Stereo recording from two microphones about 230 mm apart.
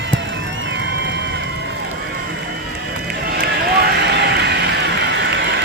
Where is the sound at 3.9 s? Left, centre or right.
Right.